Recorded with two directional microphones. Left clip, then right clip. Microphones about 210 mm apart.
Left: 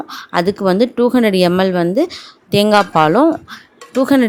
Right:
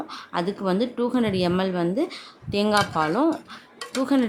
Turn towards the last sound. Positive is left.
turn(degrees=35)  # may be behind; listen again after turning